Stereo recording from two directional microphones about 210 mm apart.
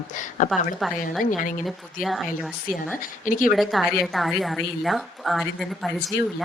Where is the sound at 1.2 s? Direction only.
40° left (ahead or behind).